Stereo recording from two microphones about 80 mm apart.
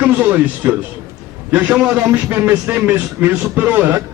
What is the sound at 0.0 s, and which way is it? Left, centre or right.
Speech, right.